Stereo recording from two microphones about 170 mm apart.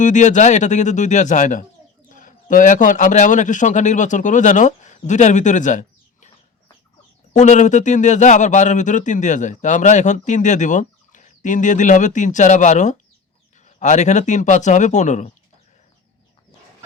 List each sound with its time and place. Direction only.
0.0 s a man's voice: 45° left (ahead or behind)
7.3 s a man's voice: 45° left (ahead or behind)